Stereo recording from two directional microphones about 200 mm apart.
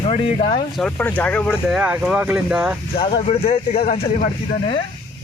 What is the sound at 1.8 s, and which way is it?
Speech, 5° right (ahead or behind).